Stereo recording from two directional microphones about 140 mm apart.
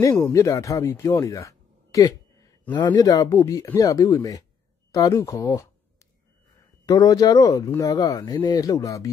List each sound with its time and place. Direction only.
0.0 s speech: 20° left (ahead or behind)
6.9 s speech: 25° left (ahead or behind)